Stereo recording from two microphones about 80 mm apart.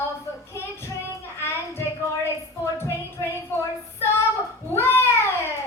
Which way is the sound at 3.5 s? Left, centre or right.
Left.